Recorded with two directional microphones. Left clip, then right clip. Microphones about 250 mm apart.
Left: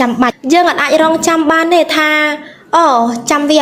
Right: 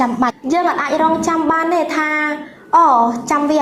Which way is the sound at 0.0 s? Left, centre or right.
Left.